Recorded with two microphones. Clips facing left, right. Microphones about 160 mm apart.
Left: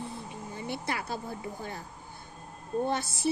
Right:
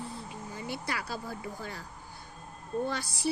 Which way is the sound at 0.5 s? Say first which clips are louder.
Left 2 dB; 25° left (ahead or behind).